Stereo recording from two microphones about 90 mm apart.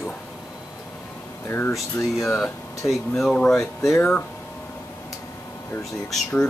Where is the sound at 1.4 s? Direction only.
20° left (ahead or behind).